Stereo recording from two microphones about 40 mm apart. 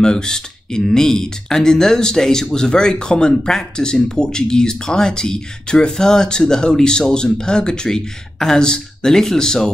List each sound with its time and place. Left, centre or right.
0.0 s speech: centre